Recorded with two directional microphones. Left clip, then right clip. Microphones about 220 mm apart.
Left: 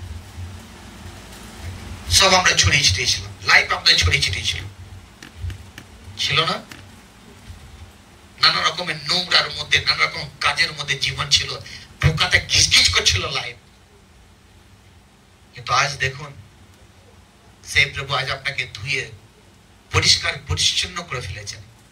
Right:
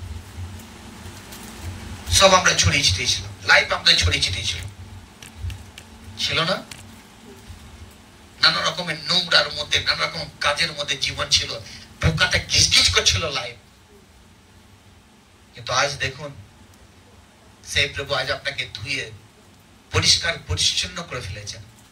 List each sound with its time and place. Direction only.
2.0 s a man's voice: 40° left (ahead or behind)
2.4 s speech: centre (ahead or behind)
3.6 s a man's voice: 30° left (ahead or behind)
6.1 s a man's voice: 30° left (ahead or behind)
8.4 s a man's voice: 30° left (ahead or behind)
15.6 s a man's voice: 30° left (ahead or behind)
17.6 s a man's voice: 30° left (ahead or behind)